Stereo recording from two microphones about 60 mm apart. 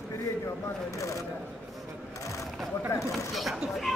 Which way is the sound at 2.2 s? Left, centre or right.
Left.